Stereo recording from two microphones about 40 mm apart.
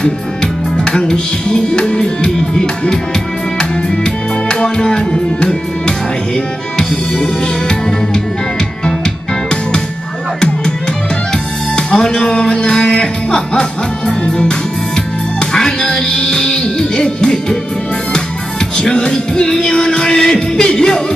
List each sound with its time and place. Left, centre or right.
0.0 s music: left
11.7 s speech: centre
12.9 s music: left
15.5 s music: centre
18.8 s music: left